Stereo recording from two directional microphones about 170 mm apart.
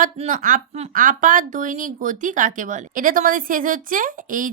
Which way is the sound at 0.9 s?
50° right (ahead or behind).